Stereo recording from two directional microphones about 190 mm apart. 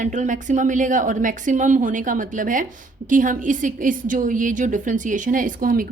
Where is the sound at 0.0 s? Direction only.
40° right (ahead or behind).